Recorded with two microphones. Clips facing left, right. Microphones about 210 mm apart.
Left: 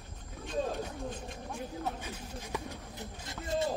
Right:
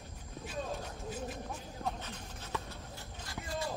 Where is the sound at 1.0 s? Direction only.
5° right (ahead or behind).